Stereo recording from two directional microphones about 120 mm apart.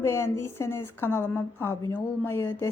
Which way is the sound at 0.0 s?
20° left (ahead or behind).